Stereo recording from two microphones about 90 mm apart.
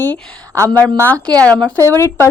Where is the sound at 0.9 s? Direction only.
20° left (ahead or behind).